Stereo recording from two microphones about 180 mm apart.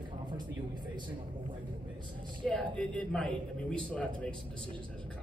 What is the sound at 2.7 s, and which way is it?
A man's voice, 5° left (ahead or behind).